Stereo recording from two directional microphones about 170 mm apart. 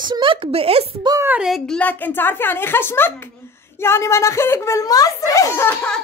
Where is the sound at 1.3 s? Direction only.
Centre (ahead or behind).